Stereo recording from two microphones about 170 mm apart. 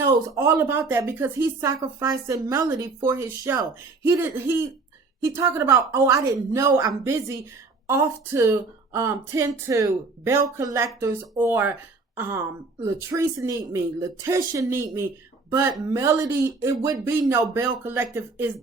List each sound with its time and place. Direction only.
0.0 s speech: 15° right (ahead or behind)